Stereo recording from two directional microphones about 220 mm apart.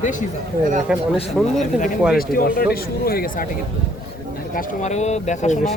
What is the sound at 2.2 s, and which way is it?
Speech, 40° left (ahead or behind).